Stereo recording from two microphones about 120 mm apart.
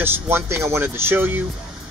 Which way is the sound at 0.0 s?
20° right (ahead or behind).